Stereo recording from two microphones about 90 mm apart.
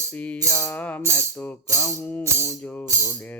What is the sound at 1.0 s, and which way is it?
Music, 30° right (ahead or behind).